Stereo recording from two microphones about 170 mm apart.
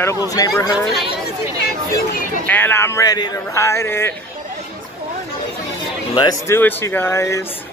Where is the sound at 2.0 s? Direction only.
55° left (ahead or behind).